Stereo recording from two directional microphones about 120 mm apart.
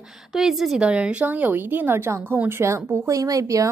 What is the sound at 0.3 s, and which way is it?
Speech, 5° right (ahead or behind).